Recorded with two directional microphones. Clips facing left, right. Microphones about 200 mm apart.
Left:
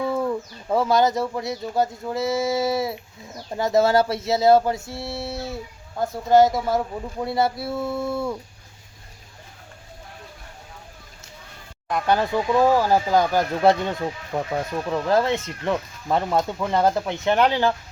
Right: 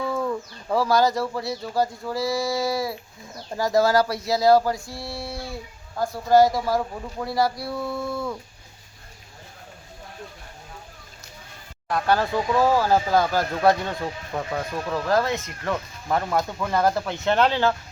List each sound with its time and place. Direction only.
0.2 s speech: 20° left (ahead or behind)
3.3 s bird: 20° left (ahead or behind)
11.9 s speech: 15° left (ahead or behind)